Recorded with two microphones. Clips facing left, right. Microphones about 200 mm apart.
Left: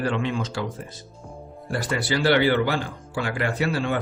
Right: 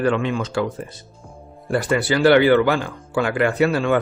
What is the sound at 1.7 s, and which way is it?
Speech, 55° right (ahead or behind).